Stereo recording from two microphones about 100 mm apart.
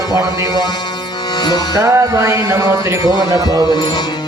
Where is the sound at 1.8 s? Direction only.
30° right (ahead or behind).